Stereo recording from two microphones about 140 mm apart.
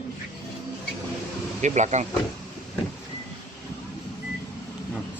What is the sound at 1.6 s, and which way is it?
Speech, 55° right (ahead or behind).